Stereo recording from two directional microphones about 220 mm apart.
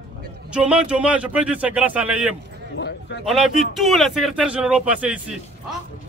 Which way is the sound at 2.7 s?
50° left (ahead or behind).